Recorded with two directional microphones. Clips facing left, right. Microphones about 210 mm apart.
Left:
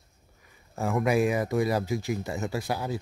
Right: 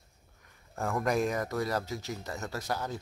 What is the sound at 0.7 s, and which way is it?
Speech, 5° left (ahead or behind).